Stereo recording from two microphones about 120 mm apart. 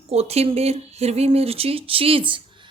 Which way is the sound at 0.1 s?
60° right (ahead or behind).